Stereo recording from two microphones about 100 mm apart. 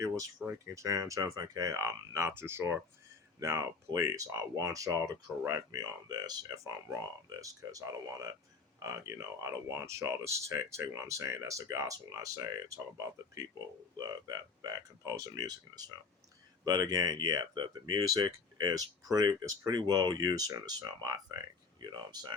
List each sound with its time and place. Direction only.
0.4 s speech: 20° right (ahead or behind)
0.7 s speech: 35° right (ahead or behind)